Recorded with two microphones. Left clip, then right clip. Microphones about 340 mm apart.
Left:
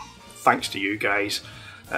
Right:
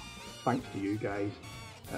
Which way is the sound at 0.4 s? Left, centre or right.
Centre.